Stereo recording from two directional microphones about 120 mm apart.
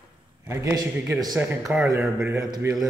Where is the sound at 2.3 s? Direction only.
30° right (ahead or behind).